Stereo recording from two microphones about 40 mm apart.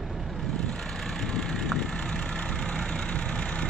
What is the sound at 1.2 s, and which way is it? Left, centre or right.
Vehicle, centre.